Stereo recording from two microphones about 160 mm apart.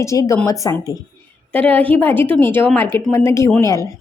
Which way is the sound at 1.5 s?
10° left (ahead or behind).